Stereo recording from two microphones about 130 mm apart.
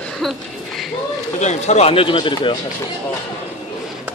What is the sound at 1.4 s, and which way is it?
Speech, 60° left (ahead or behind).